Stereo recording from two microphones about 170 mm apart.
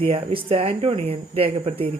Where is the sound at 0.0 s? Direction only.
35° right (ahead or behind).